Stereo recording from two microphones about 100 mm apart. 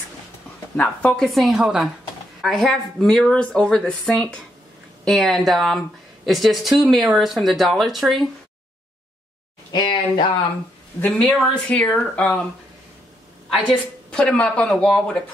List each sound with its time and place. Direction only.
0.7 s speech: 15° left (ahead or behind)
9.8 s speech: 55° left (ahead or behind)
11.0 s speech: 10° left (ahead or behind)
14.1 s speech: 10° left (ahead or behind)